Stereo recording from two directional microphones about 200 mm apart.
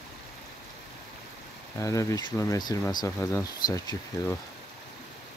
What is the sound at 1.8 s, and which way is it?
Speech, 15° left (ahead or behind).